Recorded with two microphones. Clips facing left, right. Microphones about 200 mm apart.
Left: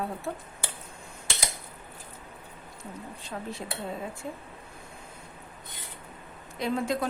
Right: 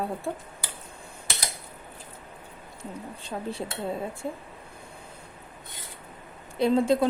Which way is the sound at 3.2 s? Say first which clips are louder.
Right 4 dB; 30° right (ahead or behind).